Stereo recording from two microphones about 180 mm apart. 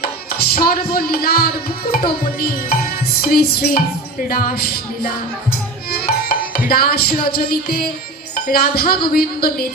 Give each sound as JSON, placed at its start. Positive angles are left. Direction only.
{"t": 0.0, "sound": "music", "side_deg": 55}
{"t": 4.3, "sound": "speech", "side_deg": 55}
{"t": 5.9, "sound": "music", "side_deg": 55}